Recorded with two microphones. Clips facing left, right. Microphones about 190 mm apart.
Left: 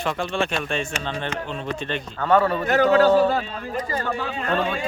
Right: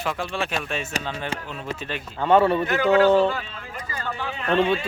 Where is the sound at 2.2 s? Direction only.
25° right (ahead or behind).